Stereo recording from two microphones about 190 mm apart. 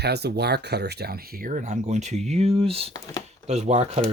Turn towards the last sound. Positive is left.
turn(degrees=-35)  # may be behind; listen again after turning